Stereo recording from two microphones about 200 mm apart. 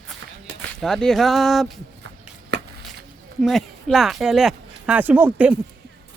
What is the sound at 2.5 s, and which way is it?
Chop, 55° right (ahead or behind).